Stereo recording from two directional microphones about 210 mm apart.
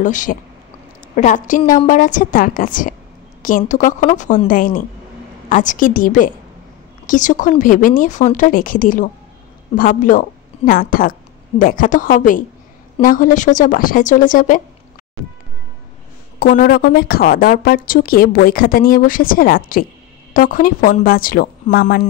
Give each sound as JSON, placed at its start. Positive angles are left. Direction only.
{"t": 0.0, "sound": "a woman's voice", "side_deg": 40}
{"t": 16.3, "sound": "speech", "side_deg": 45}